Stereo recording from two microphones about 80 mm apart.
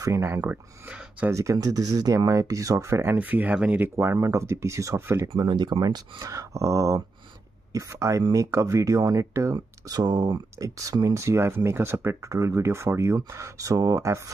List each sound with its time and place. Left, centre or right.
0.0 s speech: right
0.8 s speech: centre
1.3 s speech: right
3.2 s speech: right
3.9 s speech: right
5.5 s speech: right
5.8 s speech: right
6.2 s speech: right
11.2 s speech: right